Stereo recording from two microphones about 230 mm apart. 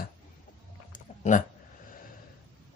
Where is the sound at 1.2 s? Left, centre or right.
Left.